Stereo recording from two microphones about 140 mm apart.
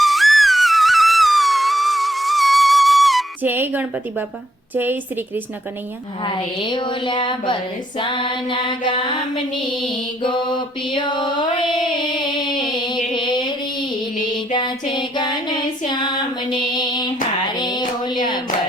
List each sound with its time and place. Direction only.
0.0 s music: centre (ahead or behind)
3.4 s a woman's voice: 15° right (ahead or behind)
6.2 s a woman's voice: 35° left (ahead or behind)
11.9 s a sound: 30° left (ahead or behind)
14.5 s female singing: 35° left (ahead or behind)
16.7 s music: 30° left (ahead or behind)